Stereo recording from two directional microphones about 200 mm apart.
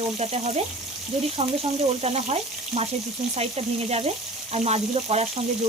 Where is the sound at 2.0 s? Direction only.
30° right (ahead or behind).